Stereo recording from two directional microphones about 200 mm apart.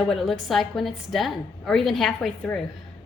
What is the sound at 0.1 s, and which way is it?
A woman's voice, centre (ahead or behind).